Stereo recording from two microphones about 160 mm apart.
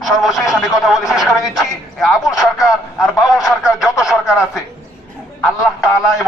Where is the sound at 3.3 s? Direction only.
20° left (ahead or behind).